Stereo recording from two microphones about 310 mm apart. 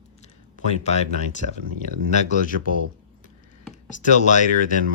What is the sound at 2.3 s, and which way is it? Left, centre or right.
Speech, left.